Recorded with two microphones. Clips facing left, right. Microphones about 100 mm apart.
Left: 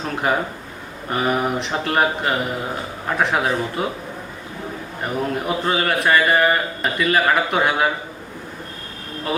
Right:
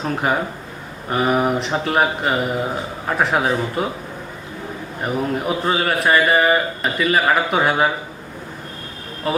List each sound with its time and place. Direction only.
0.0 s speech: centre (ahead or behind)
5.0 s speech: 5° right (ahead or behind)